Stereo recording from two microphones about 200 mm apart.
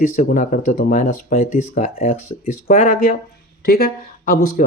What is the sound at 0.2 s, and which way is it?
Speech, 40° left (ahead or behind).